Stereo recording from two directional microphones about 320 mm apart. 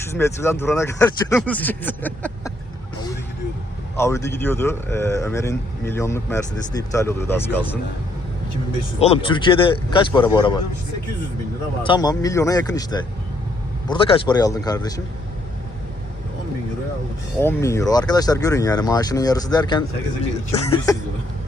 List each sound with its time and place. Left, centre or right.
0.1 s a man's voice: centre
3.9 s a man's voice: centre
9.0 s a man's voice: centre
11.8 s a man's voice: centre
17.4 s a man's voice: centre